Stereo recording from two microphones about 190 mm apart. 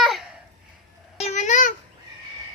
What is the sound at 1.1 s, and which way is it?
Babbling, 35° left (ahead or behind).